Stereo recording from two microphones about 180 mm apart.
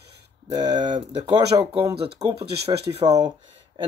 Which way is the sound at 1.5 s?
25° right (ahead or behind).